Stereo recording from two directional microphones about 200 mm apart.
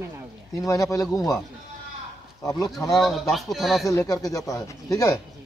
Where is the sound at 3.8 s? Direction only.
15° left (ahead or behind).